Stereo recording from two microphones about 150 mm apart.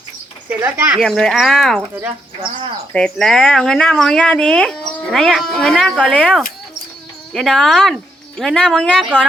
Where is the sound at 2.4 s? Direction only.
35° right (ahead or behind).